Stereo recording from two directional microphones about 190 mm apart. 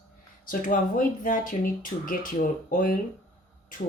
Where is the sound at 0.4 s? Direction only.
45° left (ahead or behind).